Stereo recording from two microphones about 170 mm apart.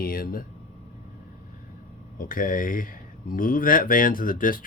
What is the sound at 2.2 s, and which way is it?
Speech, 55° left (ahead or behind).